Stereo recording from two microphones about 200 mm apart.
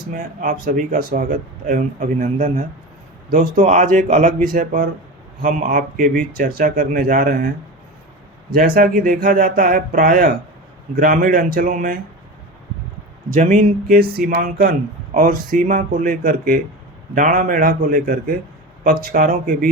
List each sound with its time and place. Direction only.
0.1 s speech: 45° right (ahead or behind)
8.5 s speech: 45° right (ahead or behind)
13.3 s speech: 40° right (ahead or behind)